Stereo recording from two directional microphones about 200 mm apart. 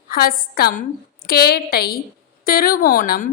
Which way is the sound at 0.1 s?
50° left (ahead or behind).